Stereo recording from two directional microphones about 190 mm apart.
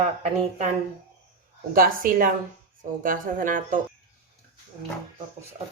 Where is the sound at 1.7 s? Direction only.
50° right (ahead or behind).